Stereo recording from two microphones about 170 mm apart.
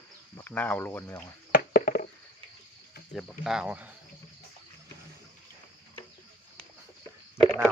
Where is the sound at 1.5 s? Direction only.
60° left (ahead or behind).